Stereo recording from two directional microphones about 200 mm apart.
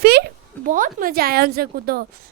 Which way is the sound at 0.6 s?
40° right (ahead or behind).